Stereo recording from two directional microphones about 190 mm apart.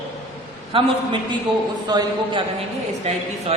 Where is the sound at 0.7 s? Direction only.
30° right (ahead or behind).